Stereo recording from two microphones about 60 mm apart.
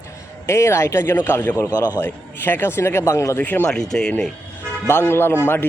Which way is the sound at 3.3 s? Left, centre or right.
Left.